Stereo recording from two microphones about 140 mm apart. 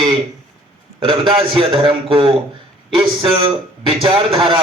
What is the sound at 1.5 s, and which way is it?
A man's voice, 35° right (ahead or behind).